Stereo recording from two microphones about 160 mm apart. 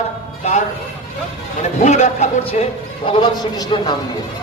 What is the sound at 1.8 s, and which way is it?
A man's voice, 45° left (ahead or behind).